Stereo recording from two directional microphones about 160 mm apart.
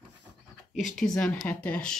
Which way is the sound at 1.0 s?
Centre (ahead or behind).